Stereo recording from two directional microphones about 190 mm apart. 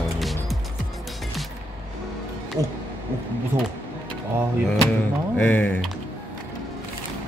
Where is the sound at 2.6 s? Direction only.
15° right (ahead or behind).